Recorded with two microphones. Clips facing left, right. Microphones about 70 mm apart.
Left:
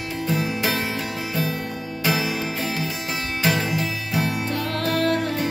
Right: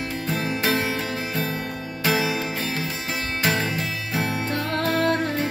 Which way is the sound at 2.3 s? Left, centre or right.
Right.